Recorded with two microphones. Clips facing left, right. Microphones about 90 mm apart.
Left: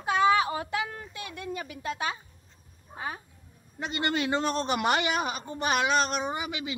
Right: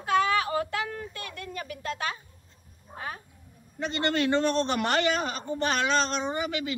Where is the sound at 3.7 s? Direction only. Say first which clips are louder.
Right 2 dB; 10° left (ahead or behind).